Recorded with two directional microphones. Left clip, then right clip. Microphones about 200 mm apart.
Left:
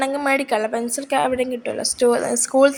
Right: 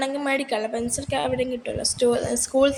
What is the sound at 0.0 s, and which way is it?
A woman's voice, 20° left (ahead or behind).